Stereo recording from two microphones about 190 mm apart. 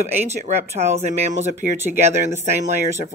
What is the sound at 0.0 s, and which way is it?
Speech, 35° right (ahead or behind).